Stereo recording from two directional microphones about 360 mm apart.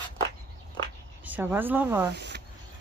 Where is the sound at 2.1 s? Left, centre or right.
Right.